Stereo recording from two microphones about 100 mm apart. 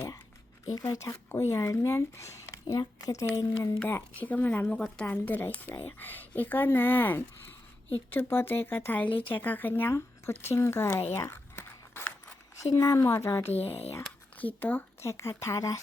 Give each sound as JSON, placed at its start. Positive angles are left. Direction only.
{"t": 0.7, "sound": "speech", "side_deg": 35}
{"t": 4.1, "sound": "speech", "side_deg": 15}
{"t": 10.4, "sound": "a sound", "side_deg": 25}
{"t": 12.7, "sound": "speech", "side_deg": 30}
{"t": 13.5, "sound": "speech", "side_deg": 85}
{"t": 14.3, "sound": "speech", "side_deg": 15}
{"t": 15.0, "sound": "speech", "side_deg": 30}